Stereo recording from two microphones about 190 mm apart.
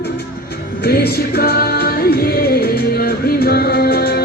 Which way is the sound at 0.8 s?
55° left (ahead or behind).